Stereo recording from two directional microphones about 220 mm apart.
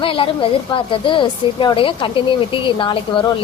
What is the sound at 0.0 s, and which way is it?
Speech, 25° left (ahead or behind).